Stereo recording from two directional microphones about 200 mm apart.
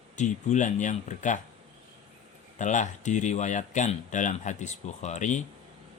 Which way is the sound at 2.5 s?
40° left (ahead or behind).